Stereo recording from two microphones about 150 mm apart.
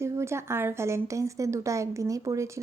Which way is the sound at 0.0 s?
20° right (ahead or behind).